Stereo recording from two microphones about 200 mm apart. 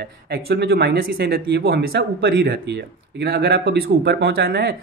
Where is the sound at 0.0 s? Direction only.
55° right (ahead or behind).